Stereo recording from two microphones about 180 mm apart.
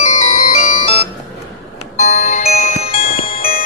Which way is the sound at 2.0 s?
40° left (ahead or behind).